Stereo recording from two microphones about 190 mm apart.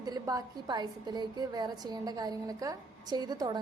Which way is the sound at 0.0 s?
20° right (ahead or behind).